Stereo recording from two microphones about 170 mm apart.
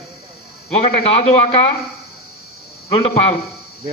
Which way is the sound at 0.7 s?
35° left (ahead or behind).